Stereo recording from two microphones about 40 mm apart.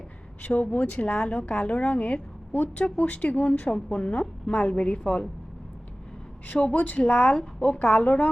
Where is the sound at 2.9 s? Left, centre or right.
Left.